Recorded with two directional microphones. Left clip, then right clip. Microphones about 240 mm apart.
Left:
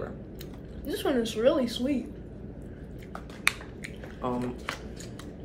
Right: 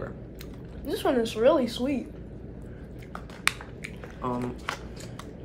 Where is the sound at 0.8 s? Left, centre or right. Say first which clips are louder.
Right 3 dB; centre.